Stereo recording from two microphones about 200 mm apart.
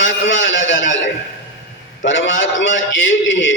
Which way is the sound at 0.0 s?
65° left (ahead or behind).